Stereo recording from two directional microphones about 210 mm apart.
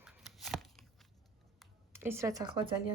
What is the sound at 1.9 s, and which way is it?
Speech, 10° right (ahead or behind).